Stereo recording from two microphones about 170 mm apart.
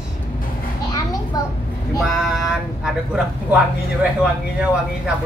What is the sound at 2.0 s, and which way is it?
Speech, 5° right (ahead or behind).